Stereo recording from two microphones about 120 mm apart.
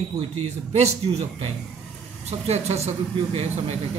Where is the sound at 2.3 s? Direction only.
60° right (ahead or behind).